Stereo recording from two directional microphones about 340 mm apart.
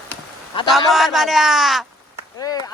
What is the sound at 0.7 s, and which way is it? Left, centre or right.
Speech, centre.